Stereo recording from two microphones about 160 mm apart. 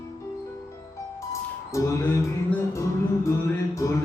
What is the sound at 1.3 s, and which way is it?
Music, 20° left (ahead or behind).